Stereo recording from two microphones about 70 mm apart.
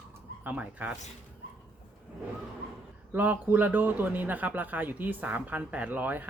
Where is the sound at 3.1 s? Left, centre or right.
Right.